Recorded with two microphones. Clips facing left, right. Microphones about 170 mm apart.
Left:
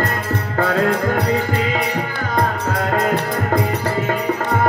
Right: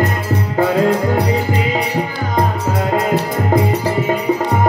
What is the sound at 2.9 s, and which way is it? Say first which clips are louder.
Music: right 2 dB; 15° right (ahead or behind).